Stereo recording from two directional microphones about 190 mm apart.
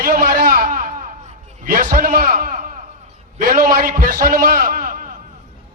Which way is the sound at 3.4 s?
50° right (ahead or behind).